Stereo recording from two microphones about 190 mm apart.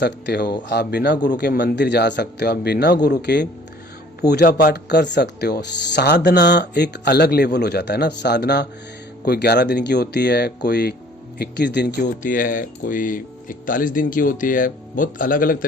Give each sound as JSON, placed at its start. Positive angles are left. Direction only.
{"t": 0.0, "sound": "speech", "side_deg": 60}
{"t": 12.0, "sound": "speech", "side_deg": 45}